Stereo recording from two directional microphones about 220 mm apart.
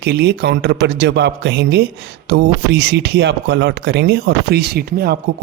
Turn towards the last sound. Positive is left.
turn(degrees=-45)  # may be behind; listen again after turning